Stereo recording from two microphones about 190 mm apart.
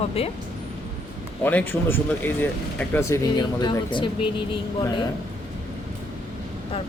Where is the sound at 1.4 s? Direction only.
10° left (ahead or behind); by 4.3 s 25° left (ahead or behind).